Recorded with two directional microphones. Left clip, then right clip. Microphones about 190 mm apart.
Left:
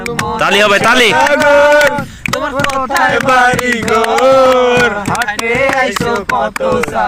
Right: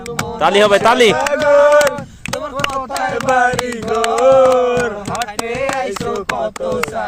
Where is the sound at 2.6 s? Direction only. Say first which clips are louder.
Left 7 dB; 55° right (ahead or behind).